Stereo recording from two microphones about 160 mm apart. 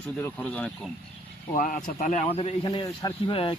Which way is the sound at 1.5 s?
55° left (ahead or behind).